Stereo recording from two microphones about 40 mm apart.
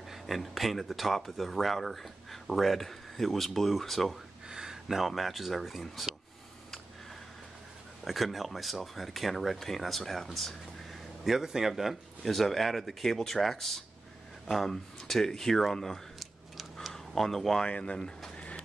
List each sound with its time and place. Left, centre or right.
0.1 s speech: centre
4.5 s speech: centre
8.0 s speech: centre
17.6 s speech: left
17.9 s speech: centre